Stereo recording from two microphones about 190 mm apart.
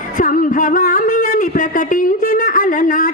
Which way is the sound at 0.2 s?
45° left (ahead or behind).